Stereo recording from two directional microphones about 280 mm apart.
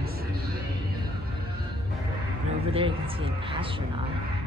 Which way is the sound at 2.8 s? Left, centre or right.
Centre.